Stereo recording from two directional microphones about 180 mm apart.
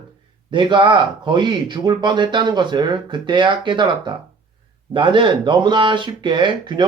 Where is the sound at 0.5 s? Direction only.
25° right (ahead or behind).